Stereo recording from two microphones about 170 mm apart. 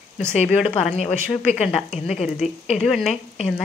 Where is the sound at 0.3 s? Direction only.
40° left (ahead or behind).